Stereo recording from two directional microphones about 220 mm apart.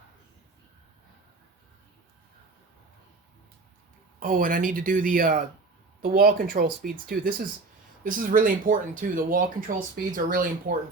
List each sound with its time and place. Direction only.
4.2 s speech: 40° right (ahead or behind)